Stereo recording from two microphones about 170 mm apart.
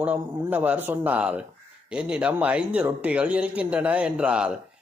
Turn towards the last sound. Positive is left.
turn(degrees=-5)  # may be behind; listen again after turning